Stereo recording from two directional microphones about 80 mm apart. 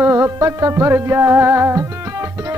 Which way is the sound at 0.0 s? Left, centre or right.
Right.